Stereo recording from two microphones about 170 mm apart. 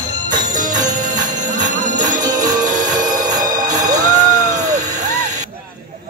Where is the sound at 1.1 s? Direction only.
25° right (ahead or behind).